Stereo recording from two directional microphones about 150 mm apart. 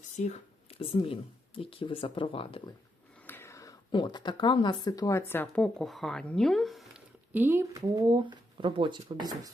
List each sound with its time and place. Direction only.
0.2 s speech: 45° left (ahead or behind)
3.2 s speech: 15° left (ahead or behind); by 7.0 s centre (ahead or behind)
7.3 s speech: 15° right (ahead or behind)